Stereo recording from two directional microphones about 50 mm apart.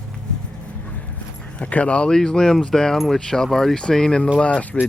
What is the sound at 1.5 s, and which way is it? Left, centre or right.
Speech, left.